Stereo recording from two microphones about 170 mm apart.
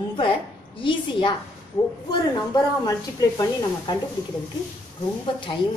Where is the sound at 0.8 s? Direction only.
30° left (ahead or behind).